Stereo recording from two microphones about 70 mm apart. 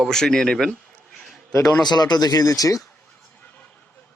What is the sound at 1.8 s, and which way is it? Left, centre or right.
Speech, left.